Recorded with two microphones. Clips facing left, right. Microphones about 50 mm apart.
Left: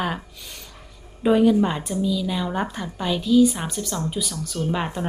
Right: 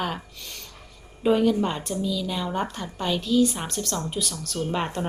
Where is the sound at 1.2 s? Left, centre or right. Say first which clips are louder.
Left 4 dB; centre.